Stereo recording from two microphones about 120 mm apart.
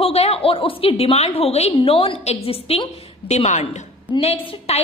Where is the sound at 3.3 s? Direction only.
65° left (ahead or behind).